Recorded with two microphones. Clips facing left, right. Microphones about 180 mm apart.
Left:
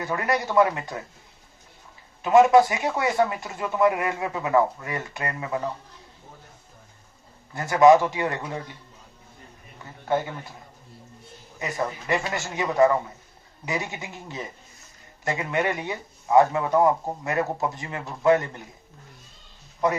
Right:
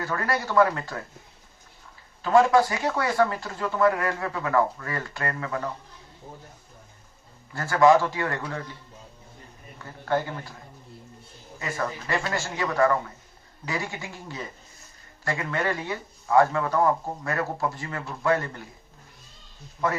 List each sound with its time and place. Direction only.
0.0 s speech: 20° left (ahead or behind)
2.2 s speech: 20° left (ahead or behind)
7.5 s speech: 20° left (ahead or behind)
9.8 s speech: 20° left (ahead or behind)
11.6 s speech: 20° left (ahead or behind)
19.8 s a man's voice: 15° left (ahead or behind)